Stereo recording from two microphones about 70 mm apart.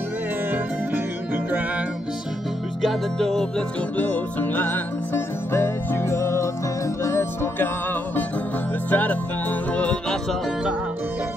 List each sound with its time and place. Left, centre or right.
0.5 s music: right
2.8 s music: centre
4.0 s music: left
8.9 s music: left